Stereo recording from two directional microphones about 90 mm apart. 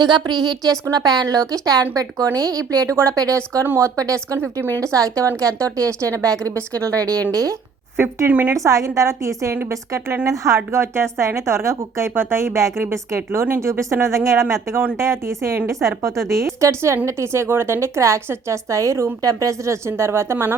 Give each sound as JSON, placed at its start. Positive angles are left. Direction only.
{"t": 0.0, "sound": "a woman's voice", "side_deg": -55}
{"t": 7.9, "sound": "speech", "side_deg": -25}
{"t": 8.5, "sound": "a woman's voice", "side_deg": -35}